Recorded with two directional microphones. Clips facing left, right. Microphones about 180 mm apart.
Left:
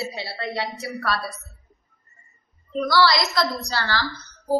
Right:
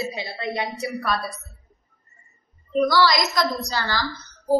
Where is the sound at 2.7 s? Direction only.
15° right (ahead or behind).